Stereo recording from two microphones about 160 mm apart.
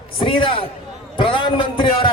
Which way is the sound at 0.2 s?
35° left (ahead or behind).